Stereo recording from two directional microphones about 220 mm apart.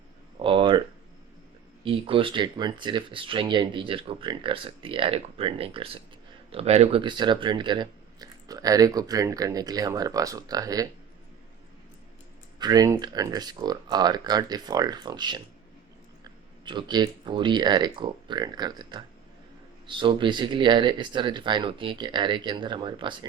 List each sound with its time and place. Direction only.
0.3 s a sound: 25° right (ahead or behind)
1.8 s speech: 25° right (ahead or behind)
12.5 s speech: 20° right (ahead or behind)